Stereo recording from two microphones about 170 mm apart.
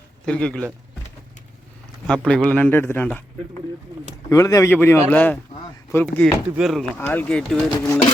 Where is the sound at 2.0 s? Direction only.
5° left (ahead or behind).